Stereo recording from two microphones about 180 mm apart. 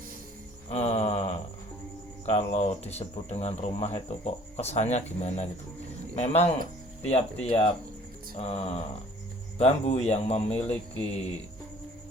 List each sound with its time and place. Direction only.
0.7 s mantra: 35° left (ahead or behind)
2.2 s speech: 35° left (ahead or behind)
10.6 s speech: 5° left (ahead or behind)